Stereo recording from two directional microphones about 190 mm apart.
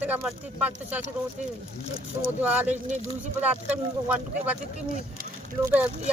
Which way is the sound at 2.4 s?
10° right (ahead or behind).